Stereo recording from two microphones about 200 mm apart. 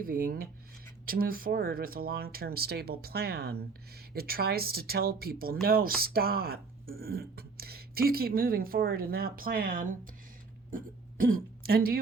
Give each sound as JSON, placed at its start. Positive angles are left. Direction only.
{"t": 0.0, "sound": "speech", "side_deg": -45}
{"t": 10.7, "sound": "throat clearing", "side_deg": -45}